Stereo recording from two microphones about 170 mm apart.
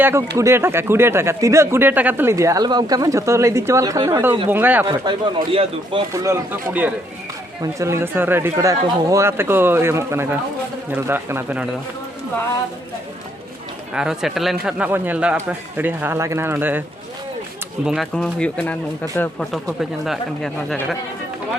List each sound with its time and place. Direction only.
0.0 s speech: 15° right (ahead or behind)
4.9 s speech: 25° right (ahead or behind)
6.2 s speech: 15° right (ahead or behind)
13.9 s speech: 5° right (ahead or behind)
17.8 s speech: centre (ahead or behind)
19.8 s speech: centre (ahead or behind)